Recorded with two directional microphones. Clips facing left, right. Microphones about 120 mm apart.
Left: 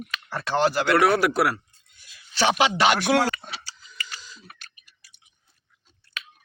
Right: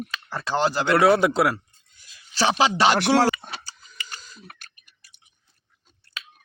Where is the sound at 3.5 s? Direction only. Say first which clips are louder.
Right 1 dB; 45° right (ahead or behind).